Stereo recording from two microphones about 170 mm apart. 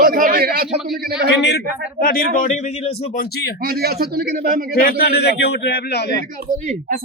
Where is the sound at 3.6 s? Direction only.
65° right (ahead or behind).